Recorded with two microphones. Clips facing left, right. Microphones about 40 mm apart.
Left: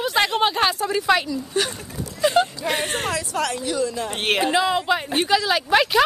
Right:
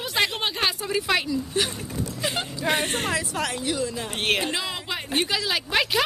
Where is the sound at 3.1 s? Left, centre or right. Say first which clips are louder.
Left 2 dB; centre.